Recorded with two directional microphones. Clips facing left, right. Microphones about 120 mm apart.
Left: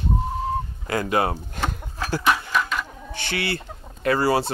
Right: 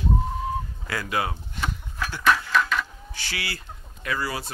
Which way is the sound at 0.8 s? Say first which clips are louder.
Left 6 dB; 40° left (ahead or behind).